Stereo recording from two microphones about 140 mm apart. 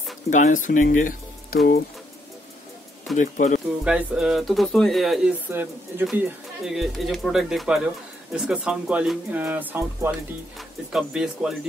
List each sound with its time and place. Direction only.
0.3 s speech: 65° left (ahead or behind); by 1.6 s 80° left
3.2 s speech: 65° left (ahead or behind)
3.8 s speech: 5° right (ahead or behind)
5.5 s speech: 15° right (ahead or behind)
6.6 s speech: centre (ahead or behind)